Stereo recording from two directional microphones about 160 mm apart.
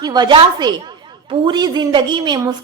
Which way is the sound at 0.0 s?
25° right (ahead or behind).